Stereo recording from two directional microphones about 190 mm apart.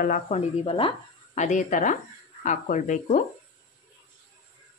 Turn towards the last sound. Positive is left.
turn(degrees=40)  # may be behind; listen again after turning